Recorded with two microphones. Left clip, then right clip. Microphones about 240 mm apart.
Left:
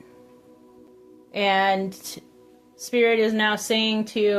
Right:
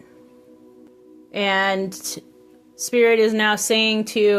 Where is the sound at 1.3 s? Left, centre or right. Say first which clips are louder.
Right 1 dB; right.